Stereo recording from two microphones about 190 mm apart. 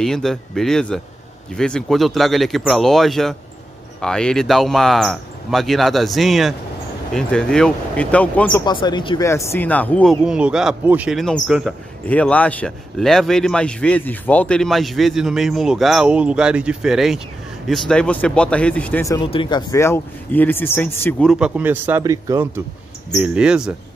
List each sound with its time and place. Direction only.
0.0 s a man's voice: centre (ahead or behind)
8.6 s speech: 25° left (ahead or behind)
9.3 s speech: 15° left (ahead or behind)
10.2 s a man's voice: 5° right (ahead or behind)
19.1 s speech: 25° left (ahead or behind); by 22.5 s 15° right (ahead or behind)
23.1 s a man's voice: 5° right (ahead or behind)